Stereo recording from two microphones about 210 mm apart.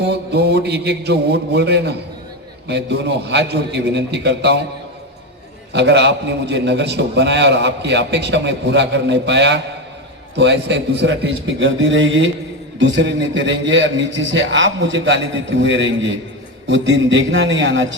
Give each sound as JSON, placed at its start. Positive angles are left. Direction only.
{"t": 0.0, "sound": "mantra", "side_deg": -50}
{"t": 5.7, "sound": "a man's voice", "side_deg": -55}